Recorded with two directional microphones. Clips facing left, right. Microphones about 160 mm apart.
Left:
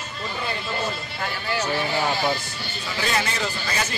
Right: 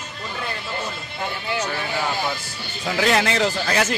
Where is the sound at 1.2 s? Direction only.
20° right (ahead or behind).